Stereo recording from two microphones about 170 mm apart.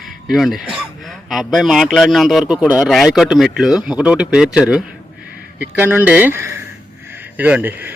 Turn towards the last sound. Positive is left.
turn(degrees=-10)  # may be behind; listen again after turning